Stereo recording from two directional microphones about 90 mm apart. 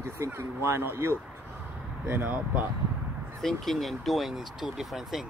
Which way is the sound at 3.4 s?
Centre (ahead or behind).